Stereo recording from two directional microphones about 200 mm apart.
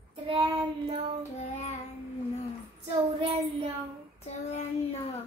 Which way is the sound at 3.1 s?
25° right (ahead or behind).